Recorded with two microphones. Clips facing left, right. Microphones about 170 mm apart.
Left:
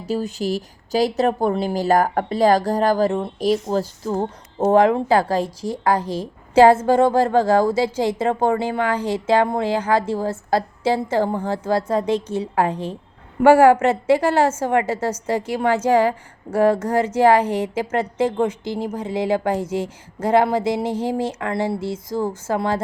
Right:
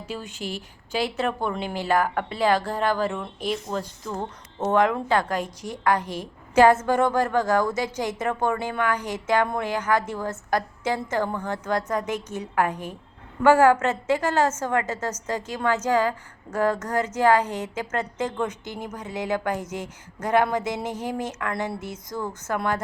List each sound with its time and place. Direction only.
0.0 s a woman's voice: 35° left (ahead or behind)
13.4 s a woman's voice: 10° left (ahead or behind)
13.9 s a woman's voice: 30° left (ahead or behind)
14.3 s a woman's voice: 10° left (ahead or behind)
16.7 s a woman's voice: 30° left (ahead or behind)